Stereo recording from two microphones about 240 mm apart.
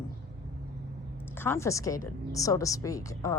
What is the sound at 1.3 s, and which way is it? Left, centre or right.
A woman's voice, centre.